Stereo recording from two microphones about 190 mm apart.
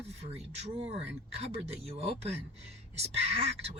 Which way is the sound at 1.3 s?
30° right (ahead or behind).